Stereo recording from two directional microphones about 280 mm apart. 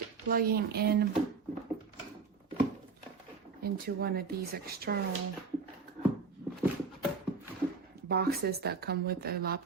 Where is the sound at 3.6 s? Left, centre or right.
Right.